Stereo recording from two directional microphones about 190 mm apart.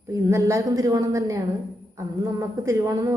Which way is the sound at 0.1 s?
15° right (ahead or behind).